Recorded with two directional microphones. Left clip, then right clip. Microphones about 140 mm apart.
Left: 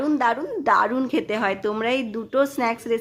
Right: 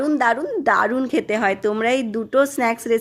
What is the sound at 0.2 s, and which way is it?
A woman's voice, 25° right (ahead or behind).